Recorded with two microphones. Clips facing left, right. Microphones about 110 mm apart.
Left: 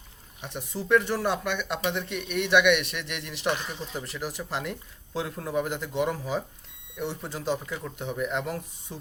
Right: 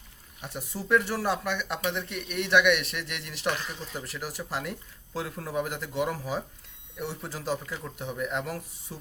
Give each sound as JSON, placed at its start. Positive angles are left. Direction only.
{"t": 0.4, "sound": "speech", "side_deg": -5}
{"t": 3.5, "sound": "speech", "side_deg": 20}
{"t": 3.9, "sound": "speech", "side_deg": 0}